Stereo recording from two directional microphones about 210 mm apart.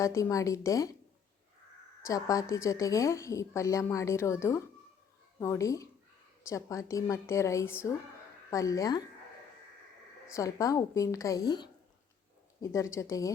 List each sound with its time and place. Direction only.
0.0 s a woman's voice: 15° left (ahead or behind)
2.0 s a woman's voice: 15° left (ahead or behind)
10.3 s a woman's voice: 15° left (ahead or behind)